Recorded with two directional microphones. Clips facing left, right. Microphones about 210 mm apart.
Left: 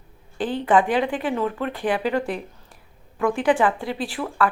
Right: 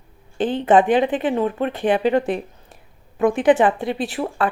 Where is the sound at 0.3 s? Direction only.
20° right (ahead or behind).